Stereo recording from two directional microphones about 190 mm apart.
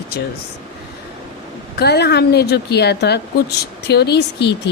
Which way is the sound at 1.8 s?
60° left (ahead or behind).